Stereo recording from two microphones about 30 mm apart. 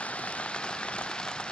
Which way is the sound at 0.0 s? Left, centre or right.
Left.